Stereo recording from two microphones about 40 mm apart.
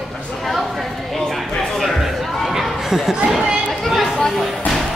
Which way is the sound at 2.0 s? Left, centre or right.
Centre.